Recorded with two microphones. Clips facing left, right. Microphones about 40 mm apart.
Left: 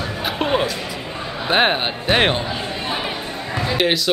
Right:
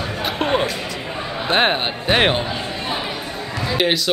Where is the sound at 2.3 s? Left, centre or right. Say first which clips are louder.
Right 1 dB; centre.